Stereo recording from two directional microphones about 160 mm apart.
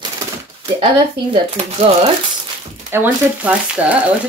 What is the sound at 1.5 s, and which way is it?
Speech, 40° right (ahead or behind).